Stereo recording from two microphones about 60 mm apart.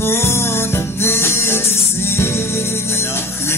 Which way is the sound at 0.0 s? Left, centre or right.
Left.